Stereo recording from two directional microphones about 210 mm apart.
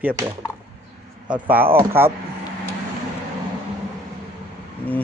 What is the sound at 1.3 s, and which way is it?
Speech, 10° right (ahead or behind).